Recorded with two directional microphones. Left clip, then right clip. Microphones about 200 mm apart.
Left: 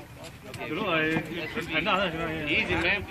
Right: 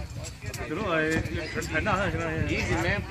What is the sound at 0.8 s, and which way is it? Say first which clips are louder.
A man's voice: even; 45° right (ahead or behind).